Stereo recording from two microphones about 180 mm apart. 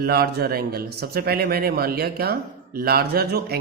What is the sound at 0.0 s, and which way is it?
A man's voice, 60° right (ahead or behind).